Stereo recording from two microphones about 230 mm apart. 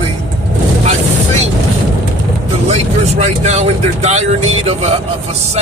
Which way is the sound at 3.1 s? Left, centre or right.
Right.